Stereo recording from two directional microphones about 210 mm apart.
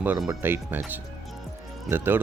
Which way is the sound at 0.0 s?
10° right (ahead or behind).